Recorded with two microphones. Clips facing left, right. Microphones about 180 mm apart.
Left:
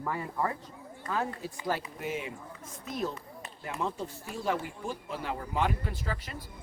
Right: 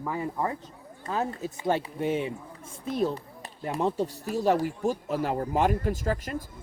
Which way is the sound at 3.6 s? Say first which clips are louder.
Right 7 dB; 35° right (ahead or behind).